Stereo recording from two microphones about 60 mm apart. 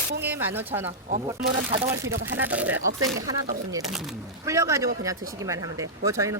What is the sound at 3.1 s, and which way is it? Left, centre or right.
Speech, right.